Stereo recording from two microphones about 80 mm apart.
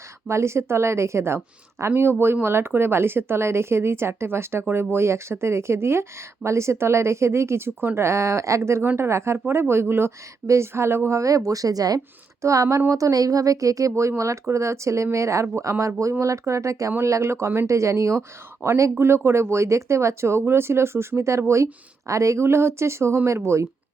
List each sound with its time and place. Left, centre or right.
0.3 s speech: right
11.2 s speech: right
11.9 s speech: right